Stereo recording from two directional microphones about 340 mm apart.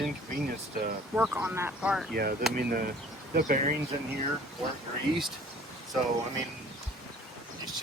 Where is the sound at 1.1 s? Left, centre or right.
Centre.